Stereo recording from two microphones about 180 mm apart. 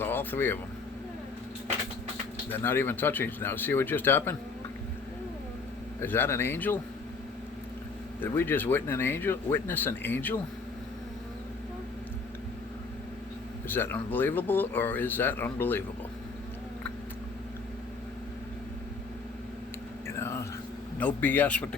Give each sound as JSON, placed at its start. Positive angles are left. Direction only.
{"t": 0.0, "sound": "speech", "side_deg": 10}
{"t": 2.5, "sound": "speech", "side_deg": 10}
{"t": 6.0, "sound": "speech", "side_deg": 10}
{"t": 8.2, "sound": "speech", "side_deg": 10}
{"t": 13.7, "sound": "speech", "side_deg": 10}
{"t": 20.1, "sound": "whispering", "side_deg": 15}
{"t": 21.0, "sound": "speech", "side_deg": 10}